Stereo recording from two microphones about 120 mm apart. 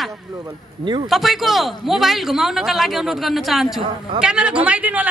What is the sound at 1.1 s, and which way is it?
Speech, centre (ahead or behind).